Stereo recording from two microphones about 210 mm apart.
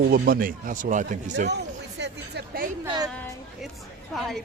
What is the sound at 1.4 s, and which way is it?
Speech, 55° right (ahead or behind).